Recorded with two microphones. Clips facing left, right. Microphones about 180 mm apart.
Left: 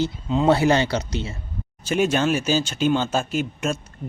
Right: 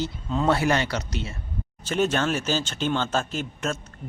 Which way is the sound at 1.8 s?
10° left (ahead or behind).